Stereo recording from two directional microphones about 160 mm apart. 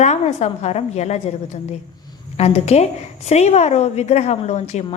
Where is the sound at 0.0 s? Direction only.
45° left (ahead or behind).